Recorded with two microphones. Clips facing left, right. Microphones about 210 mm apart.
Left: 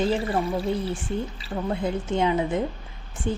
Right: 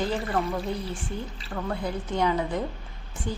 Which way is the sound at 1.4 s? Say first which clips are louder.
Left 3 dB; 20° left (ahead or behind).